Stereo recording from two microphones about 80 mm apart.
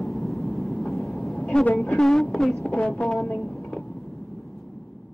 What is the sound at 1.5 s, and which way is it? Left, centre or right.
Speech, centre.